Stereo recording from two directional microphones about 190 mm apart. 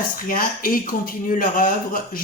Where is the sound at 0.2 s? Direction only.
50° left (ahead or behind).